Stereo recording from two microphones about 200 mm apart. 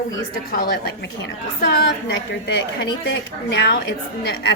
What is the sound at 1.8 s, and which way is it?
A woman's voice, 60° left (ahead or behind).